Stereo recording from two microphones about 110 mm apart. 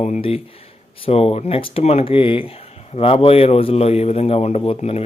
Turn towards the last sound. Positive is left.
turn(degrees=65)  # may be behind; listen again after turning